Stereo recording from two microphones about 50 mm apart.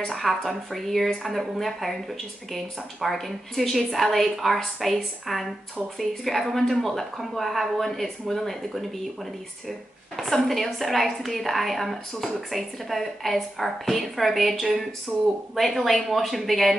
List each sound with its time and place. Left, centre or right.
0.1 s a woman's voice: centre
15.1 s speech: centre
15.5 s a woman's voice: centre